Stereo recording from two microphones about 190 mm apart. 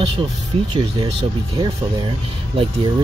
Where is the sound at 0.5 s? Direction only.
30° right (ahead or behind).